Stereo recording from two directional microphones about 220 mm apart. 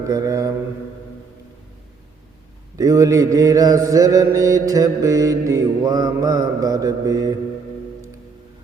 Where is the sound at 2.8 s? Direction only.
15° right (ahead or behind).